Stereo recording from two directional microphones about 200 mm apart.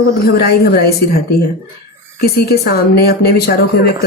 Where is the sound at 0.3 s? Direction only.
50° left (ahead or behind).